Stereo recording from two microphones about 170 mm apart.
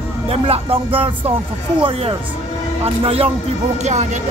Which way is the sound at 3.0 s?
35° right (ahead or behind).